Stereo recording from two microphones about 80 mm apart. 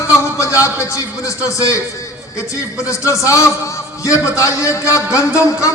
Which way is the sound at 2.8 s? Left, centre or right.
Left.